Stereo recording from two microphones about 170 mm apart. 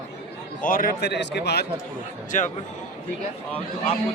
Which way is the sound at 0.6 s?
55° left (ahead or behind).